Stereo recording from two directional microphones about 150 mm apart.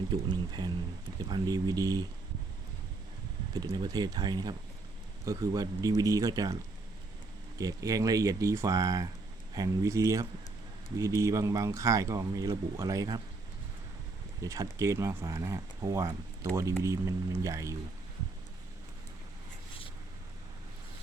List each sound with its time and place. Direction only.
0.1 s speech: 30° right (ahead or behind)
3.5 s speech: 25° right (ahead or behind)
7.6 s speech: 25° right (ahead or behind)
14.4 s speech: 20° right (ahead or behind)